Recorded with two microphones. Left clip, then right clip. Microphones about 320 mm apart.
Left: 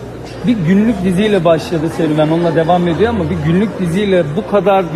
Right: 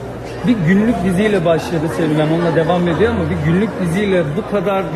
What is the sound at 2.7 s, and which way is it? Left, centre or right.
Speech, left.